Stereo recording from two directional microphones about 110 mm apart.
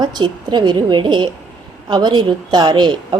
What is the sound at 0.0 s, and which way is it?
A woman's voice, 40° right (ahead or behind).